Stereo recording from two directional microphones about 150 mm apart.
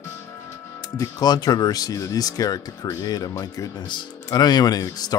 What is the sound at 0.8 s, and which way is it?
Speech, 25° left (ahead or behind).